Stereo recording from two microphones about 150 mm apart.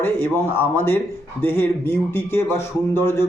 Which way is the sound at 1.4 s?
15° left (ahead or behind).